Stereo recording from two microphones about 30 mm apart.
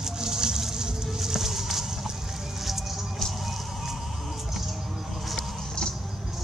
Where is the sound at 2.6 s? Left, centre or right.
Centre.